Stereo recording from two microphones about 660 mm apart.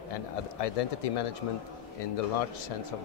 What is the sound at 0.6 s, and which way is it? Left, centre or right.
Speech, left.